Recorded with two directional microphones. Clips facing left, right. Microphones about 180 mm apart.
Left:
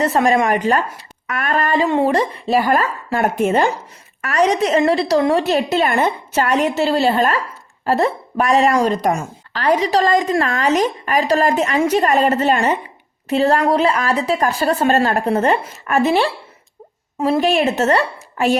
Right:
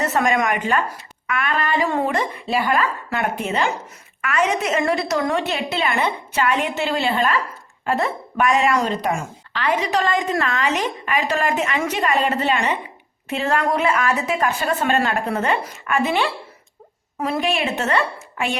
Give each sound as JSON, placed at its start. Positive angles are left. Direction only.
{"t": 0.0, "sound": "a woman's voice", "side_deg": 30}
{"t": 1.8, "sound": "a woman's voice", "side_deg": 25}
{"t": 17.2, "sound": "a woman's voice", "side_deg": 25}